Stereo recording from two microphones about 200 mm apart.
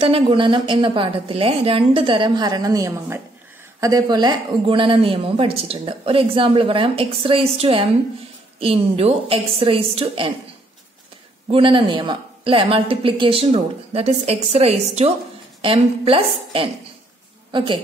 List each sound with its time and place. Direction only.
0.0 s speech: 25° right (ahead or behind)
11.5 s a woman's voice: 25° right (ahead or behind)